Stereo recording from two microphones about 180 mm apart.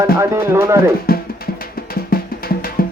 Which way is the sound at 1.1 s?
55° left (ahead or behind).